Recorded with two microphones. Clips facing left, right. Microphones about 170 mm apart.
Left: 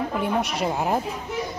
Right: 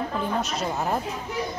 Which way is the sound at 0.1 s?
10° left (ahead or behind).